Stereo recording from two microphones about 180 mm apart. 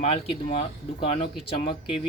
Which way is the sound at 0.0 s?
35° left (ahead or behind).